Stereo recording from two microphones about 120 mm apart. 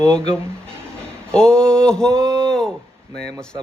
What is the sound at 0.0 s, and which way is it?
Speech, 5° left (ahead or behind).